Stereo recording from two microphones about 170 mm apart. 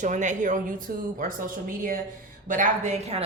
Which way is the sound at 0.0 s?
45° right (ahead or behind).